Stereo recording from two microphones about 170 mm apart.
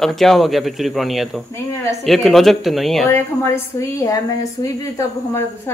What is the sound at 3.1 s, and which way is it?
A woman's voice, 15° left (ahead or behind).